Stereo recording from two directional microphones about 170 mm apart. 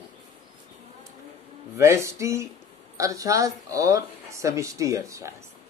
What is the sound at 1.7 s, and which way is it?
Speech, 15° right (ahead or behind).